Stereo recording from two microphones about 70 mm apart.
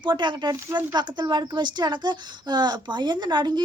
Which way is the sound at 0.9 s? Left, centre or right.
Right.